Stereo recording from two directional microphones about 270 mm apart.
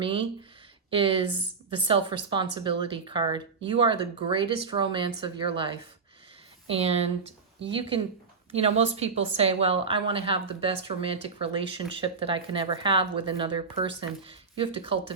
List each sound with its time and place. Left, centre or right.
0.0 s speech: centre